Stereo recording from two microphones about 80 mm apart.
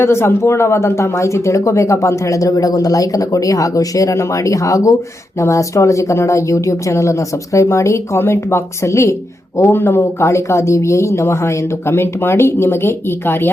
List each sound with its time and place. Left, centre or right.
0.0 s speech: left